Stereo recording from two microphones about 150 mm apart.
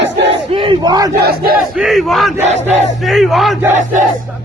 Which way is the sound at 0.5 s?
35° right (ahead or behind).